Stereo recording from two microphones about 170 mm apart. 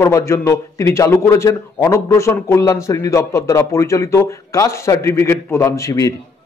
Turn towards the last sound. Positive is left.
turn(degrees=20)  # may be behind; listen again after turning